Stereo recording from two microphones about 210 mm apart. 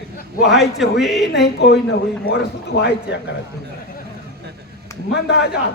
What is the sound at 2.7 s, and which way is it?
Speech, 65° left (ahead or behind).